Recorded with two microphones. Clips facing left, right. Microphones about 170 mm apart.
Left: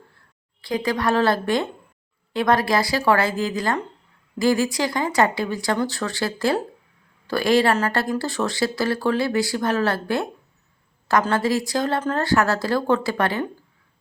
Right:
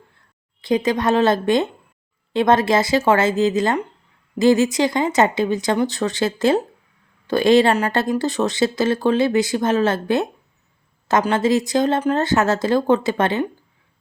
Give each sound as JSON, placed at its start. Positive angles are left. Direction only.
{"t": 0.6, "sound": "speech", "side_deg": -20}